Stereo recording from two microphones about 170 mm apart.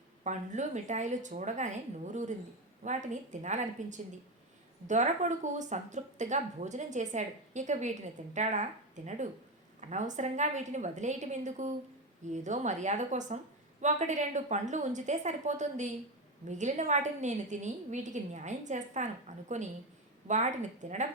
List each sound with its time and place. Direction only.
0.3 s a woman's voice: 45° right (ahead or behind)
5.5 s a woman's voice: 45° right (ahead or behind)